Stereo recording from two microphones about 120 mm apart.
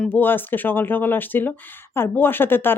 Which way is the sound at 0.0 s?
15° left (ahead or behind).